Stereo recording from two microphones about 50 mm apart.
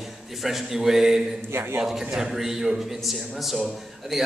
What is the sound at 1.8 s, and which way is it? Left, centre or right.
A man's voice, centre.